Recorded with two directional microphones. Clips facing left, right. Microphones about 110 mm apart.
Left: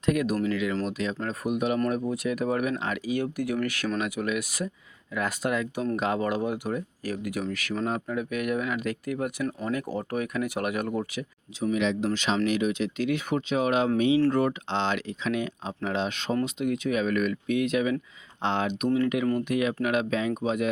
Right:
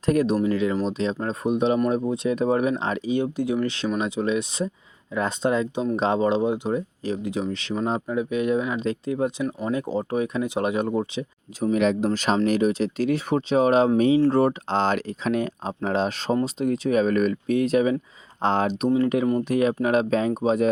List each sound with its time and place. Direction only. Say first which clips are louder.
0.0 s speech: right 4 dB; 35° right (ahead or behind)
11.6 s speech: right 5 dB; 45° right (ahead or behind)